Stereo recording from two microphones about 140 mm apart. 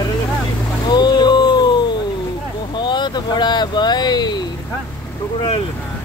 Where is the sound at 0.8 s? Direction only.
30° left (ahead or behind).